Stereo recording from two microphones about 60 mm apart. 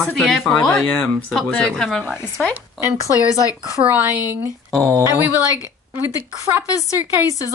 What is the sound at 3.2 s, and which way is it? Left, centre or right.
Speech, left.